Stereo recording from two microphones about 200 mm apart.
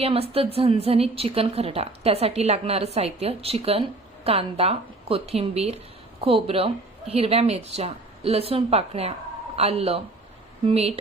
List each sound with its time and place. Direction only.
0.0 s speech: 30° right (ahead or behind)